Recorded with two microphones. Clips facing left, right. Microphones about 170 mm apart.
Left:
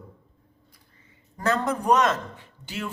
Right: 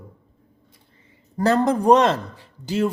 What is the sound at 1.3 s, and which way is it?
A woman's voice, 35° right (ahead or behind).